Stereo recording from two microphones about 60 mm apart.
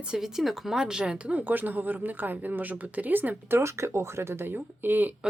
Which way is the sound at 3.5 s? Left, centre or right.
Right.